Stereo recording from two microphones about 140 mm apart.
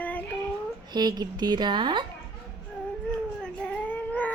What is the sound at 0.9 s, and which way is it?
A woman's voice, 30° right (ahead or behind).